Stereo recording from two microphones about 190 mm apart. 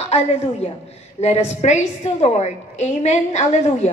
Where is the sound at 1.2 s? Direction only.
35° left (ahead or behind).